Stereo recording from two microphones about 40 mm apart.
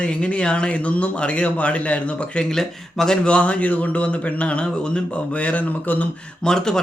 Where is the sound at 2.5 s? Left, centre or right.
Centre.